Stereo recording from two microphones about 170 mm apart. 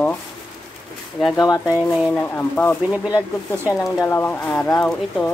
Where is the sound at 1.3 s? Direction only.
20° left (ahead or behind).